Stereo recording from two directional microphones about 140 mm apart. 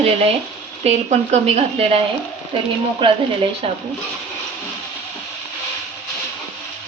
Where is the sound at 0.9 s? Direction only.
50° right (ahead or behind).